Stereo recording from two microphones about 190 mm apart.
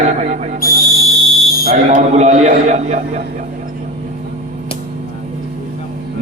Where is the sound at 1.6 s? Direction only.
40° right (ahead or behind).